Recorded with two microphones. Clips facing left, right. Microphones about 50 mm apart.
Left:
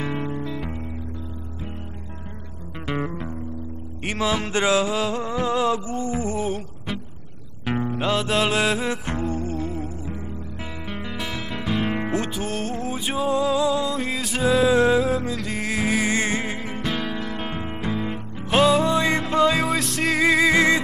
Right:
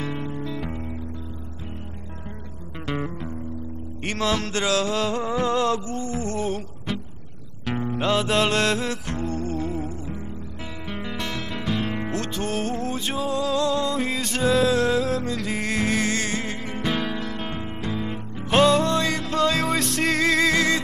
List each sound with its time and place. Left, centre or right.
0.0 s music: centre
0.5 s music: centre
2.9 s music: centre
5.9 s mantra: left
7.6 s music: centre
7.9 s music: centre; by 9.3 s left
9.3 s music: centre
12.4 s music: centre
15.3 s music: centre
16.2 s music: centre
16.8 s music: centre
19.0 s music: left